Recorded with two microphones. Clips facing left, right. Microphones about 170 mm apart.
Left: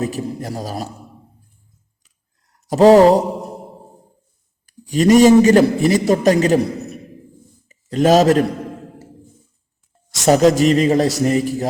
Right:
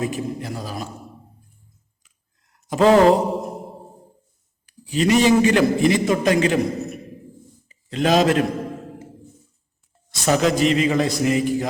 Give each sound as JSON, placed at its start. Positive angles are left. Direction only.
{"t": 0.0, "sound": "a man's voice", "side_deg": 40}
{"t": 2.6, "sound": "a man's voice", "side_deg": 40}
{"t": 4.6, "sound": "a man's voice", "side_deg": 45}
{"t": 10.2, "sound": "a man's voice", "side_deg": 40}